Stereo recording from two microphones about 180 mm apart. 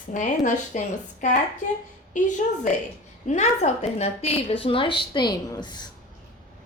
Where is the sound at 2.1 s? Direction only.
45° left (ahead or behind); by 5.9 s 25° left (ahead or behind).